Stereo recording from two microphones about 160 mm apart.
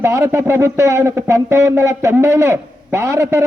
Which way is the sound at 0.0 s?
15° right (ahead or behind).